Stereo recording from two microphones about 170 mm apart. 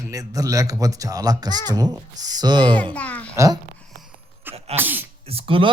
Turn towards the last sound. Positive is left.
turn(degrees=-35)  # may be behind; listen again after turning